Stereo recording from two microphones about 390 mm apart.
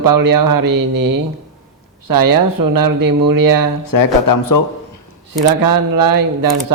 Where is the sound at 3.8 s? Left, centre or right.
Left.